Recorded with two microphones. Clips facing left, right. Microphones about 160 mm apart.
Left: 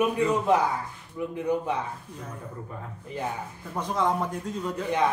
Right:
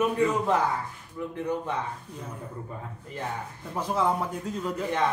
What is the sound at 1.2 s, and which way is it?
Speech, 10° left (ahead or behind).